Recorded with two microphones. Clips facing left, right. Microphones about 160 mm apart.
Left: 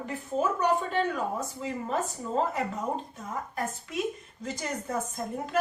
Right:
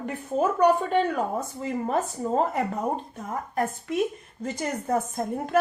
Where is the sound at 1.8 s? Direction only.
50° right (ahead or behind).